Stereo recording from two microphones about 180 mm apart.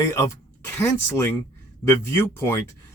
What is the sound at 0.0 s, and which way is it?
A man's voice, 15° left (ahead or behind).